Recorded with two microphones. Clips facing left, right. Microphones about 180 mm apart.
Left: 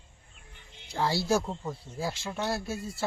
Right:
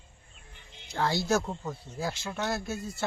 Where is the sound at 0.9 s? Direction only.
5° left (ahead or behind).